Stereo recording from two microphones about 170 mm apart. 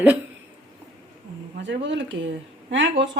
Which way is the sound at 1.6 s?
90° right.